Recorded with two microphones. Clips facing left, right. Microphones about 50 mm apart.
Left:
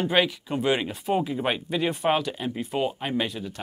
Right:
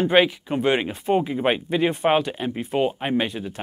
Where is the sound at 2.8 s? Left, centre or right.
Right.